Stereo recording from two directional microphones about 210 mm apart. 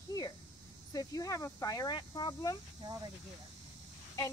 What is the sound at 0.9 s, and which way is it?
Speech, 15° left (ahead or behind).